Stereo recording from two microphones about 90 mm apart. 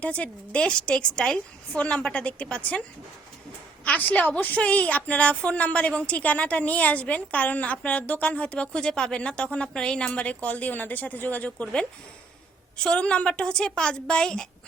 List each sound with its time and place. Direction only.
0.0 s speech: 15° left (ahead or behind)
3.8 s speech: 20° left (ahead or behind)